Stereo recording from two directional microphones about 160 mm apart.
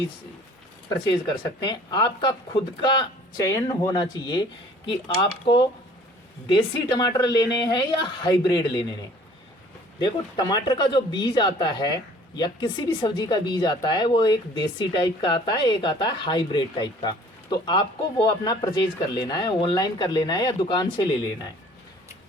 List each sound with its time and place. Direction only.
1.6 s speech: 25° left (ahead or behind)
10.0 s speech: 25° left (ahead or behind)